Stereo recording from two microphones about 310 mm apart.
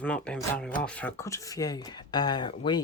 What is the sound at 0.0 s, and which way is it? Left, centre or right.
Speech, centre.